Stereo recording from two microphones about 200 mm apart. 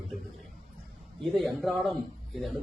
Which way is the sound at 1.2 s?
Centre (ahead or behind).